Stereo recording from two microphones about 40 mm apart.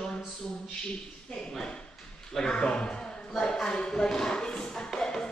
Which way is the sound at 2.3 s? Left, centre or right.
Centre.